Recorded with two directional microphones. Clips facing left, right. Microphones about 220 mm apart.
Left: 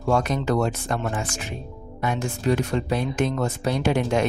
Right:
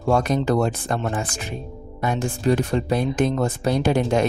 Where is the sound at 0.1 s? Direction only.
35° right (ahead or behind).